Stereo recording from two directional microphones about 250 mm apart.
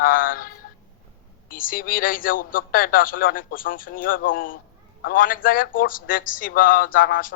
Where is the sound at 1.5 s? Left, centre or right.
Left.